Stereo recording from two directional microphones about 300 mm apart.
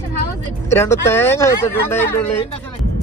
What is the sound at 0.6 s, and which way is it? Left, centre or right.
Speech, centre.